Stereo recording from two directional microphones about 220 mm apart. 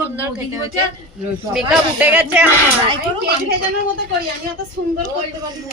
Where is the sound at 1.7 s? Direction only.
5° right (ahead or behind).